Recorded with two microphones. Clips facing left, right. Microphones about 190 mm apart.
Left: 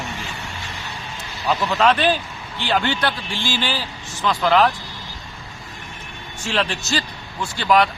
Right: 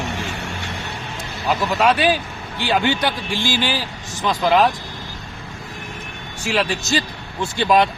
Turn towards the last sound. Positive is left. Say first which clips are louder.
# right 1 dB
turn(degrees=-20)  # may be behind; listen again after turning